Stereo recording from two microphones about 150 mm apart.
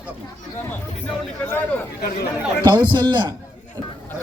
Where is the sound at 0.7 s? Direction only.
15° left (ahead or behind).